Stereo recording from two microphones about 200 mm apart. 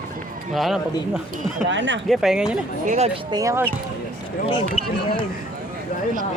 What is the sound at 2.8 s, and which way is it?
Speech, 35° right (ahead or behind).